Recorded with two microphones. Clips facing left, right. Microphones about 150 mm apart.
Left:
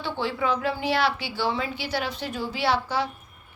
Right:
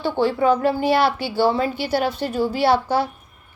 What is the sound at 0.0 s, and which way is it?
A woman's voice, 45° right (ahead or behind).